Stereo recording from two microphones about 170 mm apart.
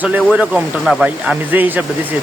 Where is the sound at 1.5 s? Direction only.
10° right (ahead or behind).